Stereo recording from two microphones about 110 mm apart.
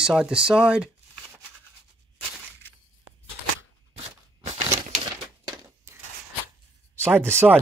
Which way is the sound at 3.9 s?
70° right (ahead or behind).